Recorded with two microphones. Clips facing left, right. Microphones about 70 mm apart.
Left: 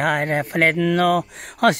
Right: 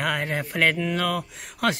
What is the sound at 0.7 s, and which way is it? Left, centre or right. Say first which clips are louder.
Speech: left 8 dB; left.